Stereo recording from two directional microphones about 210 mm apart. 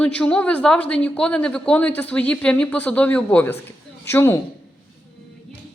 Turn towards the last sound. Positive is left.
turn(degrees=10)  # may be behind; listen again after turning